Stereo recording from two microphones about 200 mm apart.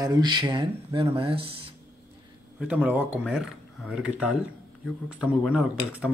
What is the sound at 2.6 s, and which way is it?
Speech, 10° right (ahead or behind).